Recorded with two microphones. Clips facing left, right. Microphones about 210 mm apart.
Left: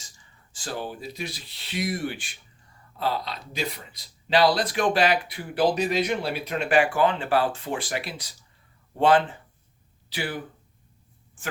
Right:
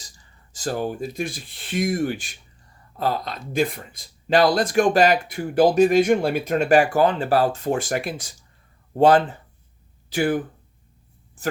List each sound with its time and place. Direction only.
0.5 s speech: 45° right (ahead or behind)